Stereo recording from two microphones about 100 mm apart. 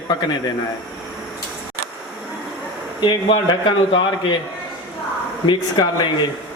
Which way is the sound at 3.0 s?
50° left (ahead or behind).